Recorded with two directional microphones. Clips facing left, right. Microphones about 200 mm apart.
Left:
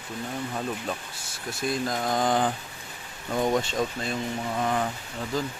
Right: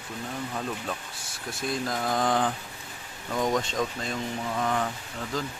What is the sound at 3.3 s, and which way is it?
Speech, 30° left (ahead or behind).